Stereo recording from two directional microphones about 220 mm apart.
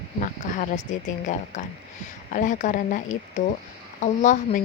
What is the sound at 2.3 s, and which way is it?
Speech, 35° left (ahead or behind).